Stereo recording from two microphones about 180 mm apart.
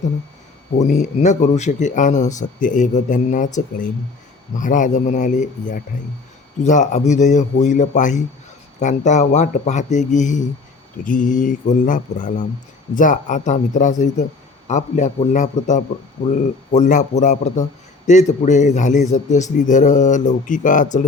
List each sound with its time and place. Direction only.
0.8 s a man's voice: 40° left (ahead or behind)